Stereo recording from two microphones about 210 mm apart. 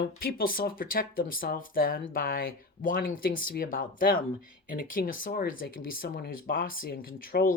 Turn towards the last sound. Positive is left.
turn(degrees=45)  # may be behind; listen again after turning